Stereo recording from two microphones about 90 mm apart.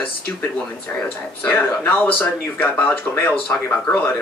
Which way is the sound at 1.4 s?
15° left (ahead or behind).